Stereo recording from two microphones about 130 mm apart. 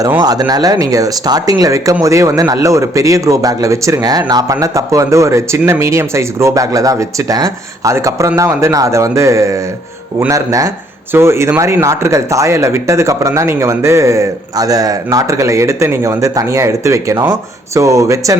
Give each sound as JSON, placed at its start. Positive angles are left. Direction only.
{"t": 0.2, "sound": "speech", "side_deg": -30}